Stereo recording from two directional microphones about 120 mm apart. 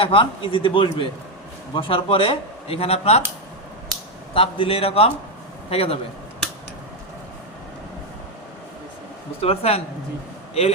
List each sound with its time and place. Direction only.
0.0 s speech: 45° left (ahead or behind)
4.4 s speech: 50° left (ahead or behind)
9.4 s speech: 55° left (ahead or behind)